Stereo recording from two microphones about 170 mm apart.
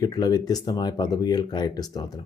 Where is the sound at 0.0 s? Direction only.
25° left (ahead or behind).